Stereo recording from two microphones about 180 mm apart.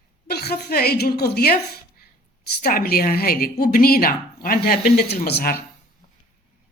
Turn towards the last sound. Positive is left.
turn(degrees=60)  # may be behind; listen again after turning